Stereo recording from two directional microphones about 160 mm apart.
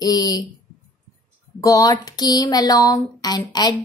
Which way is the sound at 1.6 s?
20° left (ahead or behind).